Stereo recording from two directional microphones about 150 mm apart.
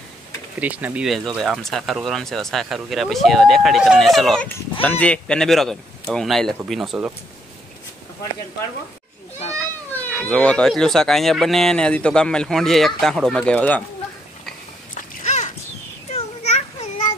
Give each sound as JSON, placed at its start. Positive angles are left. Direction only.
{"t": 0.6, "sound": "speech", "side_deg": -10}
{"t": 10.0, "sound": "speech", "side_deg": 10}
{"t": 15.2, "sound": "a sound", "side_deg": 50}